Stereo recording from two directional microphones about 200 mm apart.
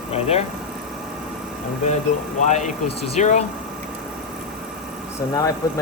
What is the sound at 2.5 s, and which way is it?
Speech, 35° left (ahead or behind).